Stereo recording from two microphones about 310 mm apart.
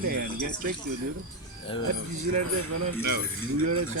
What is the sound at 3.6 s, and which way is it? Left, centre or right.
Speech, right.